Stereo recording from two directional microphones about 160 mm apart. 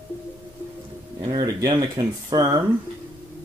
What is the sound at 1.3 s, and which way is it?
Speech, 25° right (ahead or behind).